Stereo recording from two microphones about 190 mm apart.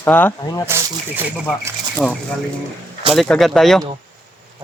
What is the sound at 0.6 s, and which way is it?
Speech, 15° right (ahead or behind).